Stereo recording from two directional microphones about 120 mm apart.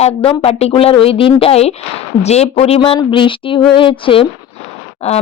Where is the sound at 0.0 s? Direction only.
55° left (ahead or behind).